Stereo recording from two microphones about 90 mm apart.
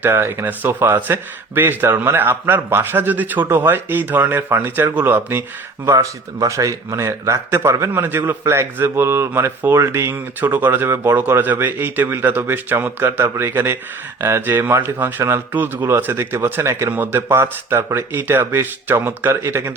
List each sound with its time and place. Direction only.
0.0 s speech: 25° right (ahead or behind)